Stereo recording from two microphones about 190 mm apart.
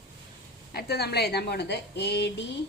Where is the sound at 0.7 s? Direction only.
55° left (ahead or behind).